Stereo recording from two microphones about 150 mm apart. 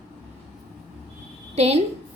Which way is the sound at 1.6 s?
45° right (ahead or behind).